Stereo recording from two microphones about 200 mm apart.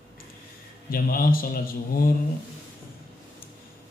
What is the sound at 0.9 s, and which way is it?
A man's voice, 45° left (ahead or behind).